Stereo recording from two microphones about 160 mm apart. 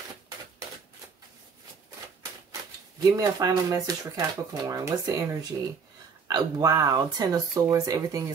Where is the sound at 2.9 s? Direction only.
25° right (ahead or behind).